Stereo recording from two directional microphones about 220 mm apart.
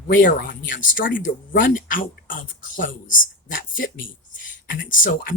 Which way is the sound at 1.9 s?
40° left (ahead or behind).